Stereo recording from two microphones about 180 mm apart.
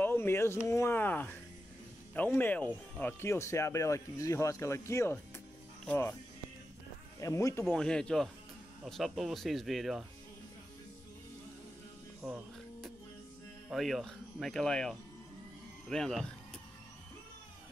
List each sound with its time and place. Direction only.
0.0 s speech: 10° left (ahead or behind)
7.2 s speech: 15° left (ahead or behind)
7.6 s speech: 5° left (ahead or behind)
12.2 s speech: centre (ahead or behind)
13.7 s speech: centre (ahead or behind)